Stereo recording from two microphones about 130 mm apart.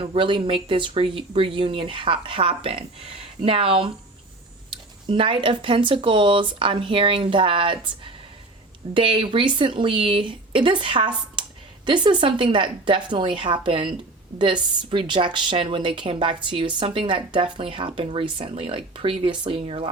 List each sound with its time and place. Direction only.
0.0 s a woman's voice: 40° right (ahead or behind)
11.4 s a sound: 40° right (ahead or behind)
11.9 s a woman's voice: 35° right (ahead or behind)